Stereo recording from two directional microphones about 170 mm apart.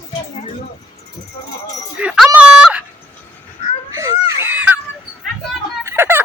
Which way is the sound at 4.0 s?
15° right (ahead or behind).